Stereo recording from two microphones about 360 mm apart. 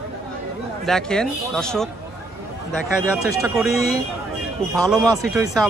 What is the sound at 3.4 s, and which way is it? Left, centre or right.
Speech, centre.